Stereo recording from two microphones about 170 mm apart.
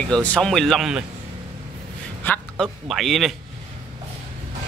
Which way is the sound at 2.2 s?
10° left (ahead or behind).